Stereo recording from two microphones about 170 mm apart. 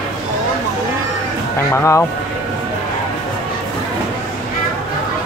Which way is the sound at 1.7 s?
15° left (ahead or behind).